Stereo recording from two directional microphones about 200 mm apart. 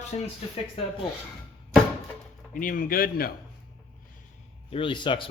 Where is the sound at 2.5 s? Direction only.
45° left (ahead or behind).